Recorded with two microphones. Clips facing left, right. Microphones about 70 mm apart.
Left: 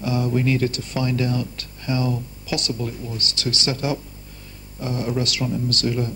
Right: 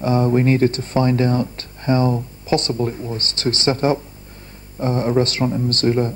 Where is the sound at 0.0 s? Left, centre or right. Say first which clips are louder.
Right 5 dB; right.